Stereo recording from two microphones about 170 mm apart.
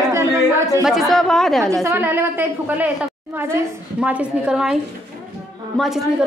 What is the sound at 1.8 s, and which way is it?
A woman's voice, 15° right (ahead or behind).